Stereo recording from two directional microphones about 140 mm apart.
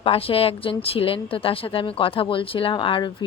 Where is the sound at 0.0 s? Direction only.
40° left (ahead or behind).